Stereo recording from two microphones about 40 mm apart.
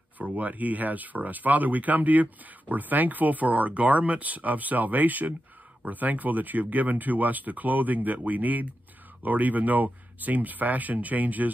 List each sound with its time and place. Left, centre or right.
0.2 s speech: right